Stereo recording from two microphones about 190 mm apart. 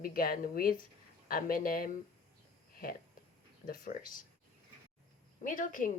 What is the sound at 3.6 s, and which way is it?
Speech, 45° left (ahead or behind).